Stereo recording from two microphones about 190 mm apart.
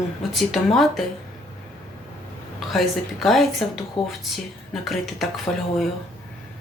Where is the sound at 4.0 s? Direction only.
25° left (ahead or behind).